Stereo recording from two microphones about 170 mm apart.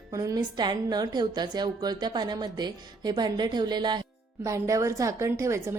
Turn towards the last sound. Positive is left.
turn(degrees=-15)  # may be behind; listen again after turning